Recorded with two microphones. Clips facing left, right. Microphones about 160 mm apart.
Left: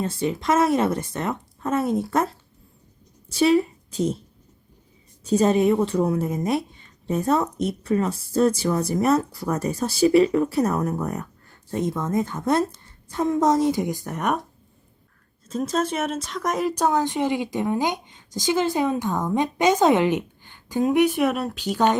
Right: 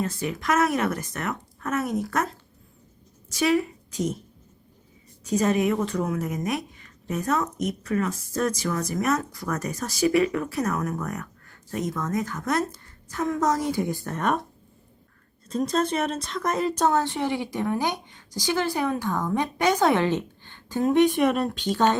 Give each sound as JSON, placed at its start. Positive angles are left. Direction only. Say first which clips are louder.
{"t": 0.0, "sound": "a woman's voice", "louder": "left 3 dB", "side_deg": 30}
{"t": 5.2, "sound": "a woman's voice", "louder": "left 4 dB", "side_deg": 30}
{"t": 15.4, "sound": "speech", "louder": "even", "side_deg": 5}